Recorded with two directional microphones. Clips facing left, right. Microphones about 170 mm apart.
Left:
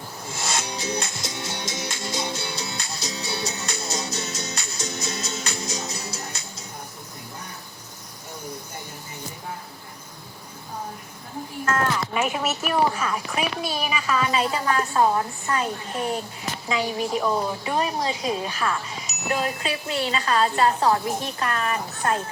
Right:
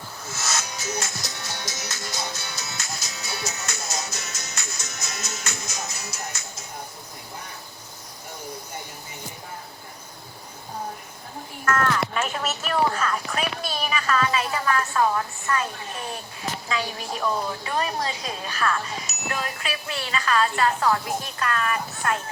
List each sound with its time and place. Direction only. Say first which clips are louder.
0.3 s music: left 2 dB; 30° left (ahead or behind)
11.6 s a sound: right 1 dB; 25° left (ahead or behind)
12.1 s a woman's voice: left 3 dB; 10° left (ahead or behind)